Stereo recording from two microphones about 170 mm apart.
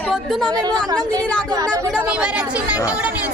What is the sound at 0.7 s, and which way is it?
Speech, 5° left (ahead or behind).